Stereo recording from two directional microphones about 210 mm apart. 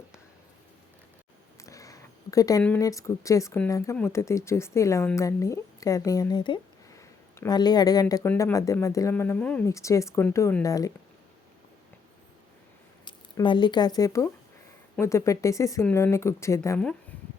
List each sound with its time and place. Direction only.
1.5 s speech: 15° left (ahead or behind)
13.1 s speech: 20° left (ahead or behind)